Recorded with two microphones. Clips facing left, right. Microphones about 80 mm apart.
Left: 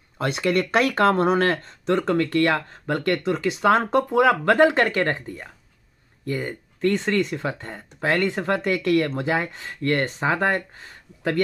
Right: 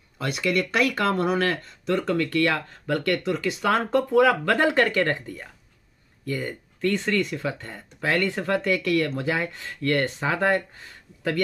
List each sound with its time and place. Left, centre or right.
0.2 s speech: left